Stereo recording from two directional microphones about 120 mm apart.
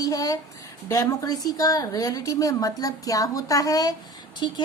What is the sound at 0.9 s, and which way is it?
A woman's voice, 30° left (ahead or behind).